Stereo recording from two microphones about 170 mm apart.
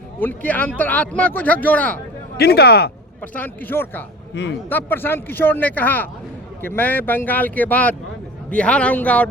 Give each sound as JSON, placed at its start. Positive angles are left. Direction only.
{"t": 0.2, "sound": "speech", "side_deg": 10}
{"t": 2.4, "sound": "speech", "side_deg": 70}
{"t": 3.2, "sound": "speech", "side_deg": 10}
{"t": 4.4, "sound": "a man's voice", "side_deg": 90}
{"t": 4.7, "sound": "speech", "side_deg": 10}